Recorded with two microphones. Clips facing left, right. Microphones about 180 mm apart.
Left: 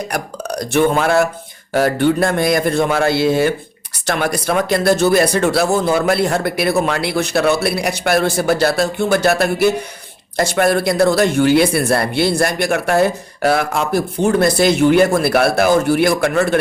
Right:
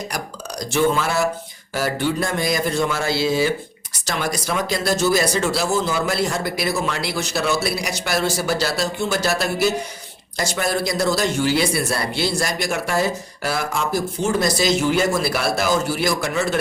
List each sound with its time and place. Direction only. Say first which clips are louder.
0.1 s speech: left 7 dB; 60° left (ahead or behind)